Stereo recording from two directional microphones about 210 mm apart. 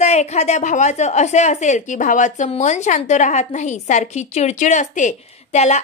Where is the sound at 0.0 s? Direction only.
30° left (ahead or behind).